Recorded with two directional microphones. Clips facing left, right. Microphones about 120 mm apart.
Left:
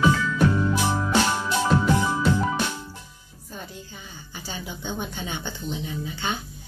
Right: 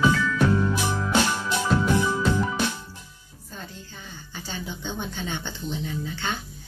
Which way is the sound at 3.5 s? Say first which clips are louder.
Left 2 dB; 15° left (ahead or behind).